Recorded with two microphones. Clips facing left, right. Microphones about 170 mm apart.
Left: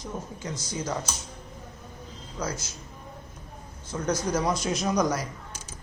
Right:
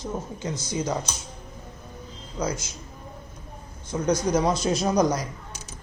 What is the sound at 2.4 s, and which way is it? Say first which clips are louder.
Speech: right 4 dB; 15° right (ahead or behind).